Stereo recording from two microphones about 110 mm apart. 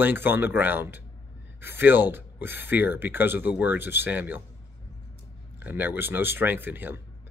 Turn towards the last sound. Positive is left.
turn(degrees=-20)  # may be behind; listen again after turning